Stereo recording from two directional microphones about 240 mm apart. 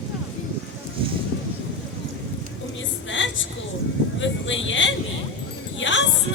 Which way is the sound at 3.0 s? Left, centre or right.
Left.